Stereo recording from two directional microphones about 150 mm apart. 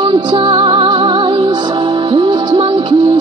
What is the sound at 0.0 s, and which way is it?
Music, 30° right (ahead or behind).